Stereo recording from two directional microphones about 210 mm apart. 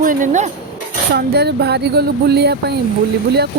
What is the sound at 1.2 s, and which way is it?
Speech, 50° right (ahead or behind).